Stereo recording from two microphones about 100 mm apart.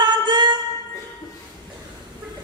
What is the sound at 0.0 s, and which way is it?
Music, 50° right (ahead or behind).